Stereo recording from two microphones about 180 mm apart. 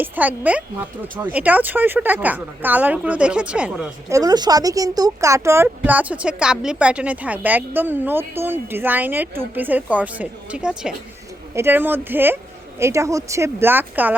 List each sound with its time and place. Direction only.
0.0 s a woman's voice: 10° right (ahead or behind)
4.1 s a woman's voice: 20° right (ahead or behind)